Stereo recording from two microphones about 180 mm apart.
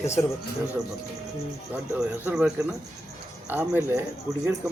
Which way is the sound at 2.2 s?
10° right (ahead or behind).